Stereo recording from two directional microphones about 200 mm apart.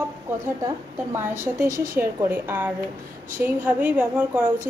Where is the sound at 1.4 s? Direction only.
10° right (ahead or behind).